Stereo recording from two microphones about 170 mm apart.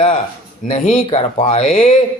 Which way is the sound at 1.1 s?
35° left (ahead or behind).